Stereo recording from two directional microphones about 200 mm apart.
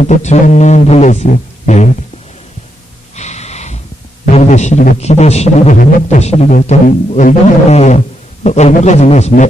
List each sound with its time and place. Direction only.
0.0 s a man's voice: 35° left (ahead or behind)
3.2 s a sound: 35° left (ahead or behind)
4.3 s a man's voice: 35° left (ahead or behind)